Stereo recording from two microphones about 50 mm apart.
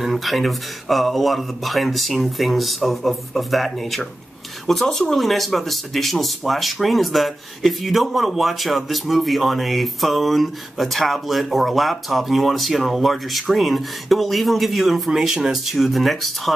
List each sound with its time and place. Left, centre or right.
0.0 s speech: centre
15.0 s speech: centre